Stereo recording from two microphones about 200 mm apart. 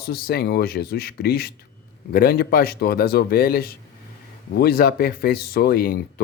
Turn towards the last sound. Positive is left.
turn(degrees=50)  # may be behind; listen again after turning